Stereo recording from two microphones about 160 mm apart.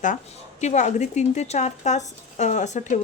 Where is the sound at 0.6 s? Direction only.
50° left (ahead or behind).